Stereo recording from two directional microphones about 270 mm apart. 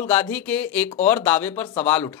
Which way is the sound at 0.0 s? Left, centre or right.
Centre.